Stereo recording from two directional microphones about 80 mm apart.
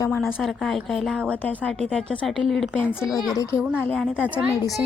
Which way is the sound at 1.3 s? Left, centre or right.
Centre.